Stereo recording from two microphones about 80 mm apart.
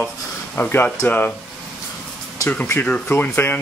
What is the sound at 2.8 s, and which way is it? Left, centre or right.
Speech, centre.